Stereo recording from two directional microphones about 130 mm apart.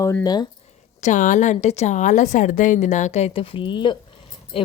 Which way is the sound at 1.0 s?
75° left (ahead or behind).